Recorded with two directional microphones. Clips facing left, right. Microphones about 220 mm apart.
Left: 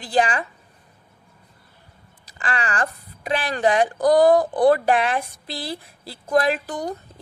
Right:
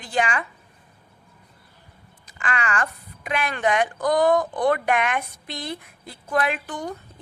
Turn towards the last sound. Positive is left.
turn(degrees=35)  # may be behind; listen again after turning